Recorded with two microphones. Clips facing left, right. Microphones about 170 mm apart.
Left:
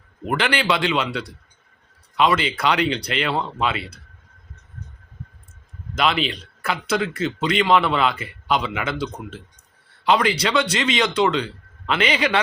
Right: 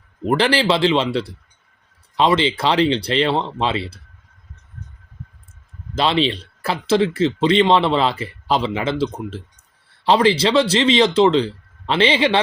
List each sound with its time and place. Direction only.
0.3 s speech: 35° right (ahead or behind)
5.9 s speech: 30° right (ahead or behind)